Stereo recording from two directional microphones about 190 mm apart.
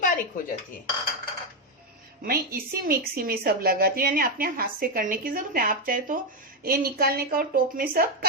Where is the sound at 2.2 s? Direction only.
50° right (ahead or behind).